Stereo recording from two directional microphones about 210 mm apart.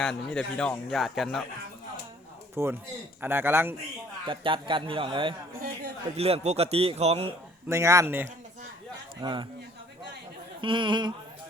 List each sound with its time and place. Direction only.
0.0 s a man's voice: 5° left (ahead or behind)
2.6 s speech: 10° right (ahead or behind)
4.3 s a man's voice: 25° right (ahead or behind)
5.5 s a man's voice: 45° right (ahead or behind)
6.1 s a man's voice: 30° right (ahead or behind)
7.7 s speech: 15° right (ahead or behind)
9.2 s a man's voice: 20° right (ahead or behind)
10.6 s a man's voice: 25° right (ahead or behind)